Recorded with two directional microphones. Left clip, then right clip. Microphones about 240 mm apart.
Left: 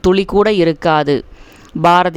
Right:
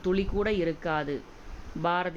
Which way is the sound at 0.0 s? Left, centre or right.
Left.